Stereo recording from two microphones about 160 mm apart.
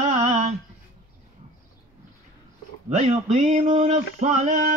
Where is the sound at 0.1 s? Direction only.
45° right (ahead or behind).